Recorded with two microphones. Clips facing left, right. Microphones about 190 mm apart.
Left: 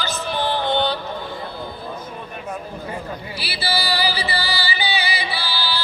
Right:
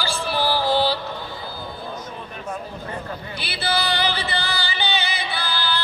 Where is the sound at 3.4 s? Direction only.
5° left (ahead or behind).